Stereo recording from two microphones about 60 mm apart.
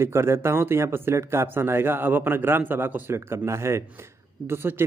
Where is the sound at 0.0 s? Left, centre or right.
Right.